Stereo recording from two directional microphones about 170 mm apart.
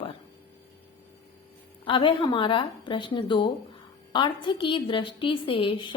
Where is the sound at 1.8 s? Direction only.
30° left (ahead or behind).